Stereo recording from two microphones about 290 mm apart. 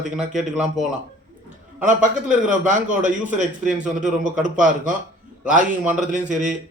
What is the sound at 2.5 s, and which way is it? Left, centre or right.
A man's voice, right.